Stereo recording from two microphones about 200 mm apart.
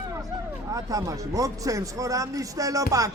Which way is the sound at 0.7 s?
15° right (ahead or behind).